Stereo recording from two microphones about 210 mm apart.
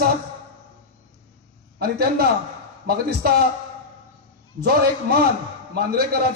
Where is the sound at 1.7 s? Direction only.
50° right (ahead or behind).